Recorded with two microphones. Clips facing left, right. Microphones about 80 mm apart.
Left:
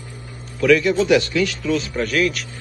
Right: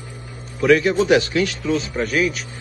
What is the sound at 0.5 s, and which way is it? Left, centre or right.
A man's voice, right.